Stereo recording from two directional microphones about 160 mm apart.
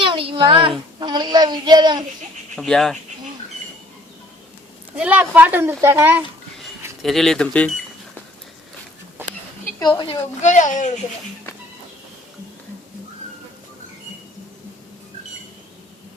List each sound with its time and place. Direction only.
0.0 s a sound: 35° right (ahead or behind)
0.9 s a child's voice: 30° right (ahead or behind)
2.6 s speech: centre (ahead or behind)
4.9 s a child's voice: 10° right (ahead or behind)
7.0 s speech: centre (ahead or behind)
9.8 s a woman's voice: 30° left (ahead or behind)
10.4 s a child's voice: 50° left (ahead or behind)